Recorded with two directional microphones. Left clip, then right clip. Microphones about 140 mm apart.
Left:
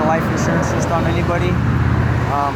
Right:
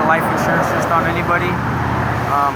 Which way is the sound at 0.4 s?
Centre (ahead or behind).